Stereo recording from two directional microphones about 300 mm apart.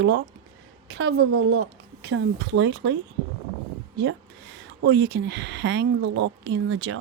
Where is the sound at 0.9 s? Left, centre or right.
Right.